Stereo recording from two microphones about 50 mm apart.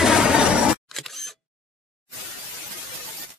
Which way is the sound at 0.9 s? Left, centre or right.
Centre.